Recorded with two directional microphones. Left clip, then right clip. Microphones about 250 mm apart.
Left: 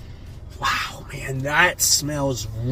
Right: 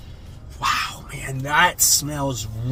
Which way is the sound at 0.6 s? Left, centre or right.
Centre.